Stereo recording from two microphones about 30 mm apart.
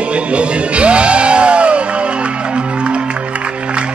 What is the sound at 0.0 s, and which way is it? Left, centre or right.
Music, right.